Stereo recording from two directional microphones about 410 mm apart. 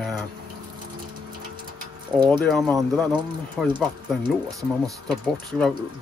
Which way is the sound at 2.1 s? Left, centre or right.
Centre.